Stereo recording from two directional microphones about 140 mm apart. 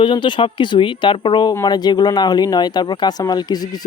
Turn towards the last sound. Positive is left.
turn(degrees=30)  # may be behind; listen again after turning